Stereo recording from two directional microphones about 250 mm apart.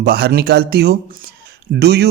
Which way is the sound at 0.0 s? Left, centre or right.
Right.